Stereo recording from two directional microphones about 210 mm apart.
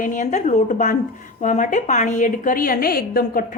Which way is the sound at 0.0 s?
40° left (ahead or behind).